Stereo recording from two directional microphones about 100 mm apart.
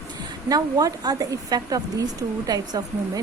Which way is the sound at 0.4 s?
35° right (ahead or behind).